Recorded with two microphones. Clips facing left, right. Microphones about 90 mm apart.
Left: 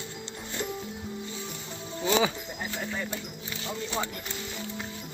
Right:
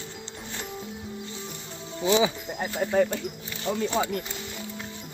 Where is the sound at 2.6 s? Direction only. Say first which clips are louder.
Right 14 dB; 55° right (ahead or behind).